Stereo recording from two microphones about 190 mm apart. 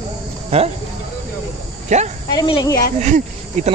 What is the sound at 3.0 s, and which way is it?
Speech, 40° right (ahead or behind).